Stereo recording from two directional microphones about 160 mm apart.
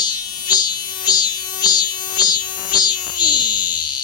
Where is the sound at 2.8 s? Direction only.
25° left (ahead or behind).